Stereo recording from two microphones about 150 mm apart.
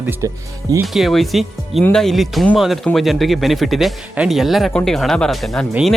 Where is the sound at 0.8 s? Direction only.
Centre (ahead or behind).